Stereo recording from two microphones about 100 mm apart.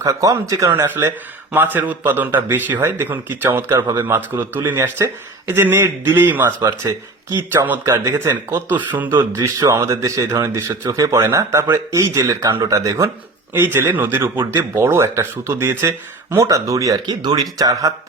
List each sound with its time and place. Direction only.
0.0 s speech: 35° right (ahead or behind)
0.7 s speech: 25° right (ahead or behind)
4.4 s speech: 20° right (ahead or behind)
6.4 s speech: 35° right (ahead or behind)
7.3 s speech: 20° right (ahead or behind)
9.4 s speech: 35° right (ahead or behind)
13.5 s speech: 20° right (ahead or behind)